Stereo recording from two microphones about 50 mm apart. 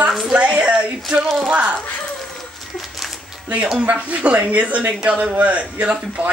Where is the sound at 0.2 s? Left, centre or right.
Right.